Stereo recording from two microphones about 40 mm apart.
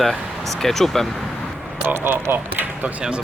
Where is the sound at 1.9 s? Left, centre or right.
Right.